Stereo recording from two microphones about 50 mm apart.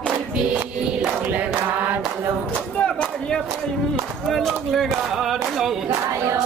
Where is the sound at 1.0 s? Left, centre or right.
Right.